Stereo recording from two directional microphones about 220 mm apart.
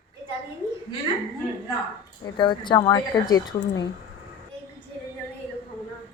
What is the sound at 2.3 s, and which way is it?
A woman's voice, 20° left (ahead or behind).